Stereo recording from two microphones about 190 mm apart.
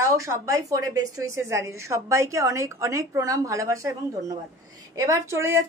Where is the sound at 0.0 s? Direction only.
15° right (ahead or behind).